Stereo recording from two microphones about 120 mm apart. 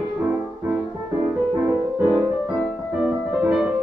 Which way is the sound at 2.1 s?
5° right (ahead or behind).